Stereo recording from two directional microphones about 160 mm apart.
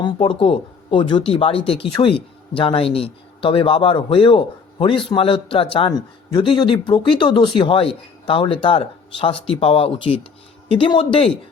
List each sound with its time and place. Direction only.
0.0 s speech: 30° left (ahead or behind)